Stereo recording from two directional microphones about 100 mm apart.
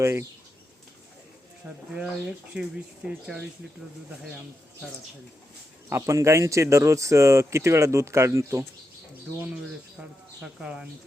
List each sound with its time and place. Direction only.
0.0 s speech: 25° right (ahead or behind)
1.9 s speech: 10° right (ahead or behind)
5.9 s speech: 30° right (ahead or behind)
10.4 s speech: 10° right (ahead or behind)